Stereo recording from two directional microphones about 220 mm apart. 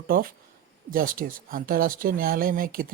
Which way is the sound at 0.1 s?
40° right (ahead or behind).